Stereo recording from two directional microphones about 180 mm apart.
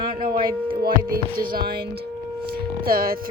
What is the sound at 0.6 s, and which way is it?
Speech, 55° right (ahead or behind).